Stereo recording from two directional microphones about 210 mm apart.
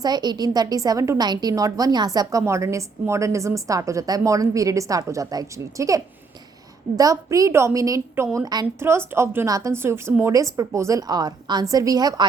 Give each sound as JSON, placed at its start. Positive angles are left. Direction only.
{"t": 0.0, "sound": "a woman's voice", "side_deg": -20}